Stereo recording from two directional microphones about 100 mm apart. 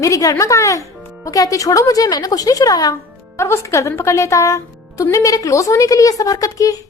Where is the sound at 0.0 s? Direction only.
35° left (ahead or behind).